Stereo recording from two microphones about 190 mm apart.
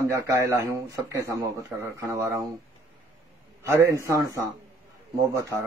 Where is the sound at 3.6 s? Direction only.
15° right (ahead or behind).